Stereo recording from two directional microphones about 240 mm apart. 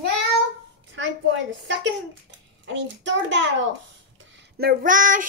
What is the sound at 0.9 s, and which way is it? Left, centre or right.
A child's voice, right.